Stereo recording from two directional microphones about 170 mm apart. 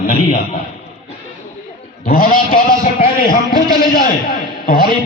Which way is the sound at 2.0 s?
60° left (ahead or behind).